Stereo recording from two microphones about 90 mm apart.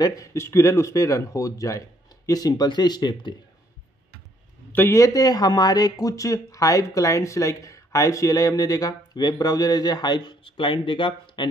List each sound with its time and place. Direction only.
0.0 s speech: 40° left (ahead or behind); by 3.3 s 55° left (ahead or behind)
4.7 s speech: 35° left (ahead or behind); by 11.4 s 70° left (ahead or behind)